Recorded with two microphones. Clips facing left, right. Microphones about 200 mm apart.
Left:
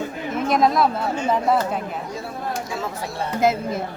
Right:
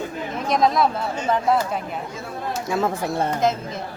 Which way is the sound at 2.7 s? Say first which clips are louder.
Right 6 dB; 50° right (ahead or behind).